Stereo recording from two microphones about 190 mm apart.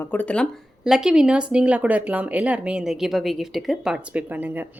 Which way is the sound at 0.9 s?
5° right (ahead or behind).